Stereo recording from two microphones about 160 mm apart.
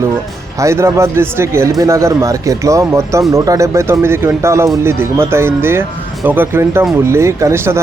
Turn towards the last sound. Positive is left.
turn(degrees=-15)  # may be behind; listen again after turning